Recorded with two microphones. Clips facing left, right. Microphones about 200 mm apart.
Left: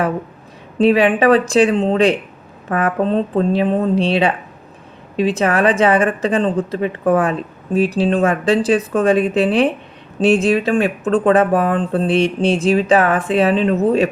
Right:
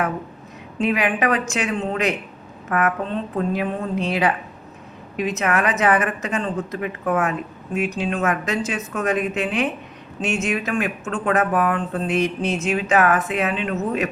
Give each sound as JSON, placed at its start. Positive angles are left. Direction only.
{"t": 0.8, "sound": "a woman's voice", "side_deg": 30}